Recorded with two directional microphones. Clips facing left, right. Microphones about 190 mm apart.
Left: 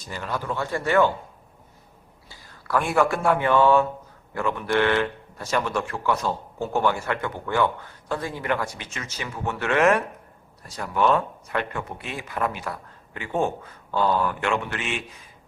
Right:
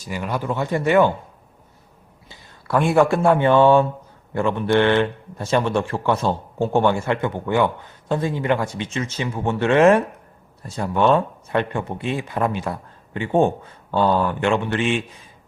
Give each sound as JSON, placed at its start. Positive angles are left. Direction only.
{"t": 0.0, "sound": "speech", "side_deg": -15}
{"t": 2.3, "sound": "speech", "side_deg": -25}